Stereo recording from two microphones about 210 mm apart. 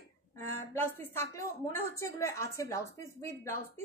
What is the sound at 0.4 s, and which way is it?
A woman's voice, 10° left (ahead or behind).